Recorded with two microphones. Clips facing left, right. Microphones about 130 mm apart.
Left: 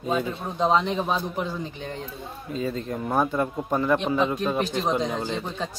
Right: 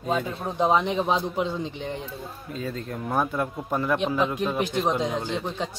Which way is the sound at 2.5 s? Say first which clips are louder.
Left 4 dB; centre (ahead or behind).